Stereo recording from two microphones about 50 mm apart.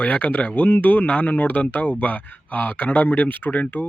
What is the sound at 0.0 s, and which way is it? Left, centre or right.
Speech, left.